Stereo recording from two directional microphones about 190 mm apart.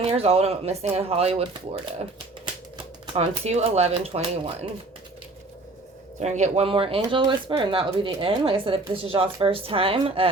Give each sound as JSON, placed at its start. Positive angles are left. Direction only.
{"t": 0.0, "sound": "speech", "side_deg": -35}
{"t": 2.7, "sound": "speech", "side_deg": -30}
{"t": 6.1, "sound": "speech", "side_deg": -35}